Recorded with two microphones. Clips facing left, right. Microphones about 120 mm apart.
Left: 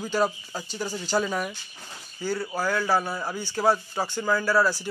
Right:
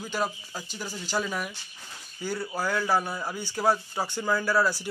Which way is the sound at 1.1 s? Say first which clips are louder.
Left 4 dB; 10° left (ahead or behind).